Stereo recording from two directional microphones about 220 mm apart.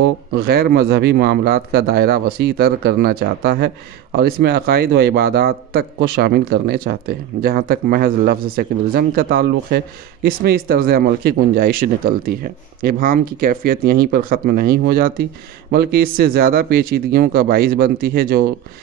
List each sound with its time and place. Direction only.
0.3 s a man's voice: 45° right (ahead or behind)